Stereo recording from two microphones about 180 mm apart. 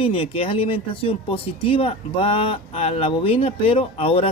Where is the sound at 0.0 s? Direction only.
30° left (ahead or behind).